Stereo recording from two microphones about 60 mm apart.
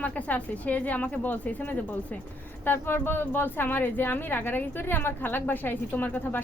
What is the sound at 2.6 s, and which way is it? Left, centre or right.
Speech, left.